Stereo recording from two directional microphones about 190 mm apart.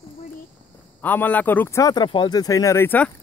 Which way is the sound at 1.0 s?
10° left (ahead or behind).